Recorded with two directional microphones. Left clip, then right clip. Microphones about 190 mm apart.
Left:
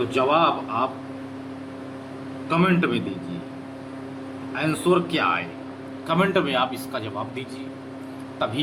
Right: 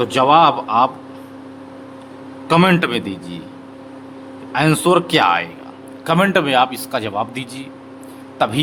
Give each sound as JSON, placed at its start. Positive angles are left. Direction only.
{"t": 0.0, "sound": "a man's voice", "side_deg": -60}
{"t": 2.5, "sound": "a man's voice", "side_deg": -60}
{"t": 4.5, "sound": "a man's voice", "side_deg": -60}